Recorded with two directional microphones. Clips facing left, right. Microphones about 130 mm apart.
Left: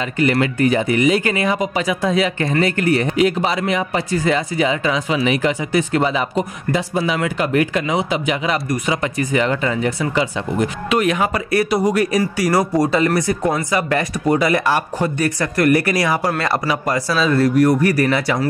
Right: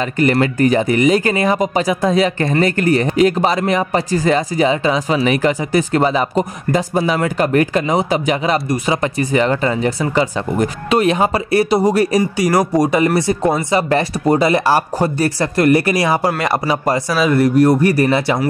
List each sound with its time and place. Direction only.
0.2 s speech: 40° right (ahead or behind)
12.2 s speech: 20° right (ahead or behind)
16.6 s speech: 25° right (ahead or behind)
17.1 s speech: 15° right (ahead or behind)